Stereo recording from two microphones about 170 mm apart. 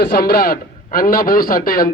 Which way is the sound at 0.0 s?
65° left (ahead or behind).